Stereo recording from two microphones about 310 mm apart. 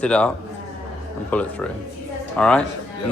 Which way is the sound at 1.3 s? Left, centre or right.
Centre.